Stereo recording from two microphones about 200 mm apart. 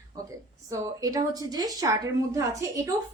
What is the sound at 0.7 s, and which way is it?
A woman's voice, 15° right (ahead or behind).